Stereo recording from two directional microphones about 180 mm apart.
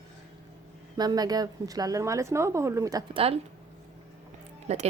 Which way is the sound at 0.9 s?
20° right (ahead or behind).